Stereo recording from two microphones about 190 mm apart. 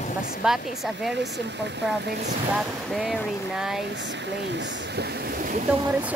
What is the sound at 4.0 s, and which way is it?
Speech, 70° right (ahead or behind).